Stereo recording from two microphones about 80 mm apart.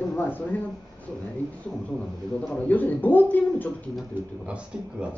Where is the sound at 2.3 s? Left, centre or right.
Centre.